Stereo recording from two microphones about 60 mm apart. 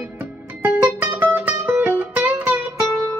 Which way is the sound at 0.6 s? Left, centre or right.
Right.